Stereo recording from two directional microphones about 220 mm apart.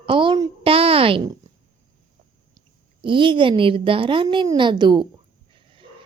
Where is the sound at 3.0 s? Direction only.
20° right (ahead or behind).